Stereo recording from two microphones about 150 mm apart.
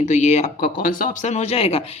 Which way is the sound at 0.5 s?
70° left (ahead or behind).